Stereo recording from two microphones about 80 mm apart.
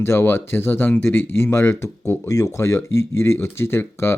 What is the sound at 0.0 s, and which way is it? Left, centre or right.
Speech, left.